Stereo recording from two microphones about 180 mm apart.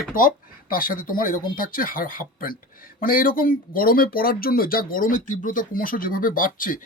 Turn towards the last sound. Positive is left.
turn(degrees=50)  # may be behind; listen again after turning